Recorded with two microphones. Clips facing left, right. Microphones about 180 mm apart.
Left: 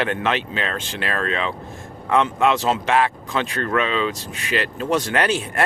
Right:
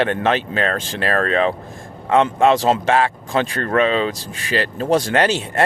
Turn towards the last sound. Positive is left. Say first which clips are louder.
# right 3 dB
turn(degrees=-25)  # may be behind; listen again after turning